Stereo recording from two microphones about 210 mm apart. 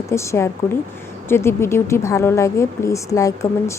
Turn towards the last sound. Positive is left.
turn(degrees=15)  # may be behind; listen again after turning